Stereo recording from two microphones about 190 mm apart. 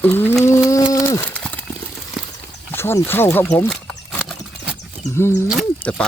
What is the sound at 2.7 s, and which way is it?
Speech, 10° left (ahead or behind).